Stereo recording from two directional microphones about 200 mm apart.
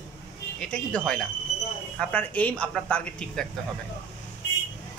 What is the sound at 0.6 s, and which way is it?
Speech, 5° left (ahead or behind).